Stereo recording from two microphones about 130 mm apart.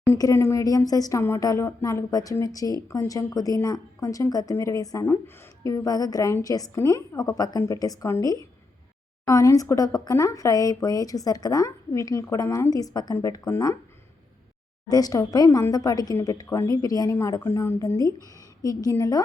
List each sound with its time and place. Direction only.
0.1 s a woman's voice: 25° left (ahead or behind)
14.8 s a woman's voice: 30° left (ahead or behind)